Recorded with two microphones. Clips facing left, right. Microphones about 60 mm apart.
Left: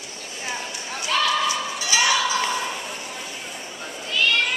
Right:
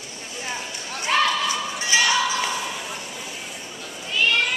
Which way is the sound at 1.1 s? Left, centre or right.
Right.